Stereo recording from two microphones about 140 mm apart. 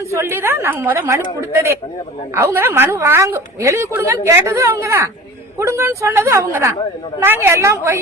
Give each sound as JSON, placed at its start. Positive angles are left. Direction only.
{"t": 0.1, "sound": "a woman's voice", "side_deg": -15}